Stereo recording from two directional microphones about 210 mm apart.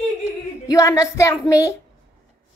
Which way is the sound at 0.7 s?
15° left (ahead or behind).